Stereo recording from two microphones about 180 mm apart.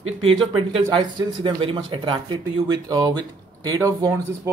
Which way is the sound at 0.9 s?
30° right (ahead or behind).